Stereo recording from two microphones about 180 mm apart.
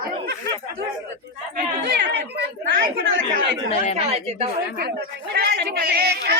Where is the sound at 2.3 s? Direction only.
55° right (ahead or behind).